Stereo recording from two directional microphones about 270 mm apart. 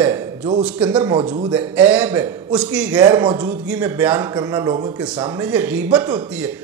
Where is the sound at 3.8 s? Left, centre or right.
Centre.